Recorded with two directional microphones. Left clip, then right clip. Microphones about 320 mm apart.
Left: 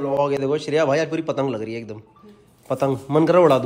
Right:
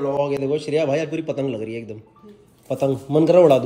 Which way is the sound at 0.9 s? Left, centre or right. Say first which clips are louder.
Left 2 dB; left.